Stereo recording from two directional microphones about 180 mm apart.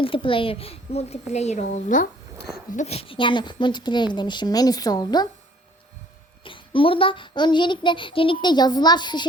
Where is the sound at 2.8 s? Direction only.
35° left (ahead or behind).